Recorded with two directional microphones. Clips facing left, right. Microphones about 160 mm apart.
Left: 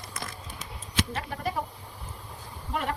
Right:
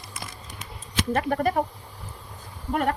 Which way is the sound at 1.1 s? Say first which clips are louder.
Right 9 dB; 55° right (ahead or behind).